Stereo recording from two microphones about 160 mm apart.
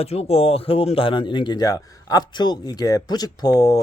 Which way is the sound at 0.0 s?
40° left (ahead or behind).